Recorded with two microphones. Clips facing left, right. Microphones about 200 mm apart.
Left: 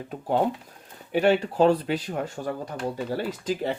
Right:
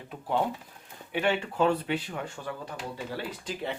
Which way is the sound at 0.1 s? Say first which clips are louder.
Left 4 dB; 45° left (ahead or behind).